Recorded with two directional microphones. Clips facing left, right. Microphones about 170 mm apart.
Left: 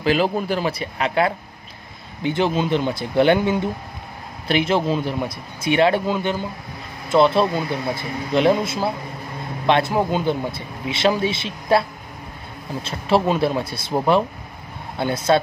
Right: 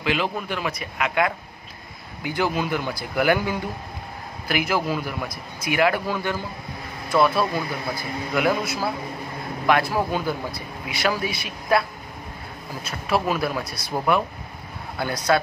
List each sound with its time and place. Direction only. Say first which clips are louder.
0.0 s a man's voice: left 6 dB; 35° left (ahead or behind)
12.8 s a man's voice: left 5 dB; 25° left (ahead or behind)